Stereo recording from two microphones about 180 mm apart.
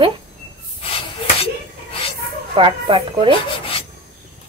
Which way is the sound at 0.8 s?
30° left (ahead or behind).